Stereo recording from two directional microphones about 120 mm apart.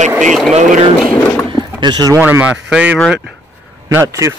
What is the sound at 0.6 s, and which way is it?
Speech, 75° right (ahead or behind).